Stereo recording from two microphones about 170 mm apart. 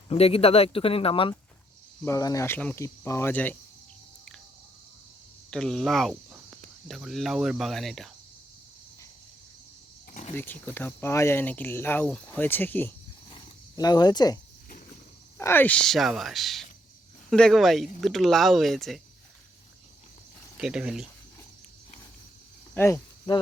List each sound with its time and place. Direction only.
0.1 s speech: 35° left (ahead or behind)
2.0 s speech: 20° left (ahead or behind)
5.5 s speech: 5° left (ahead or behind)
10.1 s vehicle: 50° left (ahead or behind)
10.3 s speech: 10° left (ahead or behind)
13.3 s a sound: 25° left (ahead or behind)
15.4 s speech: 15° left (ahead or behind)
20.6 s speech: 5° right (ahead or behind)
22.7 s speech: 15° left (ahead or behind)